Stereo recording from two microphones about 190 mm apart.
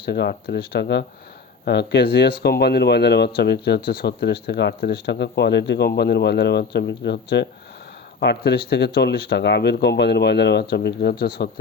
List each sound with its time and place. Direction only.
0.0 s speech: 60° left (ahead or behind)